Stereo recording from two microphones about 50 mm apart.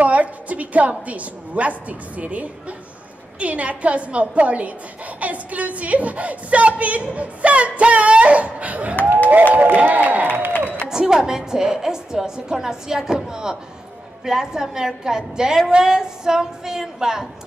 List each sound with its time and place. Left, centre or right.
0.0 s a woman's voice: right
10.9 s a woman's voice: centre